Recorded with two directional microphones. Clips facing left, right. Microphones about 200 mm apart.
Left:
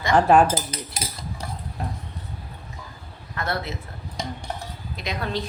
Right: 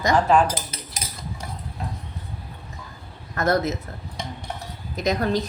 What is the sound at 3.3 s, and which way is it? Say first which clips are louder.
Speech: right 7 dB; 45° right (ahead or behind).